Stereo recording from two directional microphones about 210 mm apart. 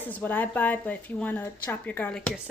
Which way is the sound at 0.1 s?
10° left (ahead or behind).